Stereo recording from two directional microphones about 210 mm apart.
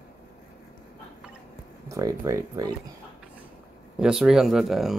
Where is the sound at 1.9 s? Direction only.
15° right (ahead or behind).